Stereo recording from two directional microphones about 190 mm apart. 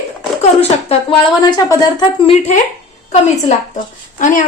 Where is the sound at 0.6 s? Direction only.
30° left (ahead or behind).